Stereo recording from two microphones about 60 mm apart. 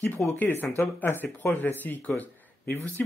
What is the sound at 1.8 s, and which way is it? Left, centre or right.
Speech, left.